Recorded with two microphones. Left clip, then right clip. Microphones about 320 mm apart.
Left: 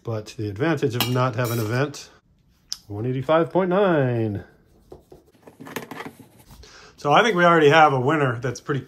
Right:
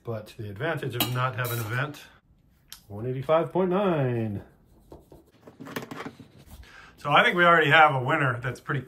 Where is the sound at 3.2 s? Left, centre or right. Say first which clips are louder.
Left 4 dB; left.